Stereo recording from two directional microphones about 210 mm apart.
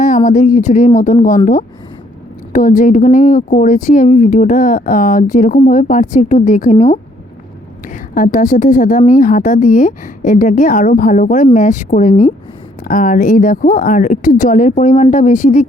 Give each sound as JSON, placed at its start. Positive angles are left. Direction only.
{"t": 0.3, "sound": "speech", "side_deg": 35}
{"t": 2.5, "sound": "speech", "side_deg": 40}
{"t": 8.1, "sound": "speech", "side_deg": 40}